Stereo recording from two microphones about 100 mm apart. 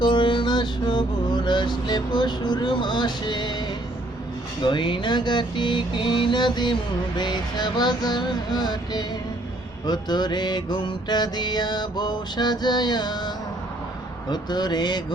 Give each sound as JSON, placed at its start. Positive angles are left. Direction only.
{"t": 0.0, "sound": "mantra", "side_deg": 50}
{"t": 4.6, "sound": "mantra", "side_deg": 55}